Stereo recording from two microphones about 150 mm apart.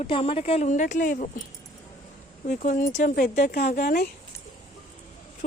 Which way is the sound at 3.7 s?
75° left (ahead or behind).